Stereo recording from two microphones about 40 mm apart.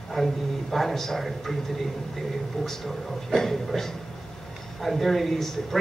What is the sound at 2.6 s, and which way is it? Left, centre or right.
A man's voice, centre.